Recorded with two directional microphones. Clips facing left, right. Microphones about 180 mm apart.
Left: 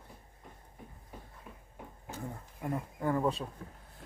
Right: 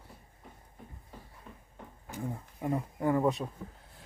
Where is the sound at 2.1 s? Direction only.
20° right (ahead or behind).